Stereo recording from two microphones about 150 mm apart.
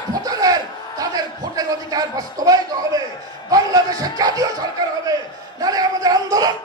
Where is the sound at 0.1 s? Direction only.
25° right (ahead or behind).